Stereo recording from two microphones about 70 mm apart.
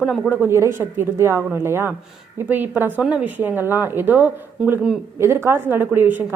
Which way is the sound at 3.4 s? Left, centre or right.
Right.